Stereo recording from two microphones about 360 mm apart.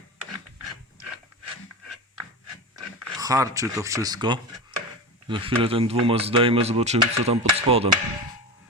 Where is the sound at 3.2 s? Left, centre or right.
Centre.